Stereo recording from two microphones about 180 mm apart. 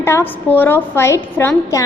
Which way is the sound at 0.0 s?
15° left (ahead or behind).